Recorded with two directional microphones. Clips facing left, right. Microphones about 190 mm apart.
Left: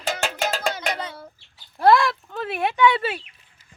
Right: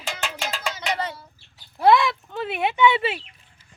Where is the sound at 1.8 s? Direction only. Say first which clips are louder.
Even; centre (ahead or behind).